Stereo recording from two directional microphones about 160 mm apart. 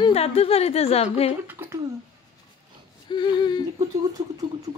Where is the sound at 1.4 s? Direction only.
10° right (ahead or behind).